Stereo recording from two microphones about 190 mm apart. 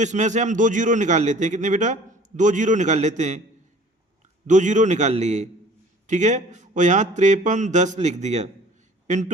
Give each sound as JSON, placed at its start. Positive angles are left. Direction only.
{"t": 0.0, "sound": "a man's voice", "side_deg": -40}
{"t": 4.4, "sound": "a man's voice", "side_deg": -40}